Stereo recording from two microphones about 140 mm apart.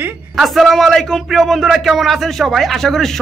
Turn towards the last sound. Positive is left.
turn(degrees=0)  # may be behind; listen again after turning